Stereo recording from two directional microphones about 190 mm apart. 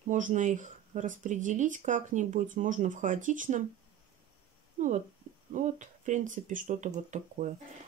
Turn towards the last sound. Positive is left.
turn(degrees=-40)  # may be behind; listen again after turning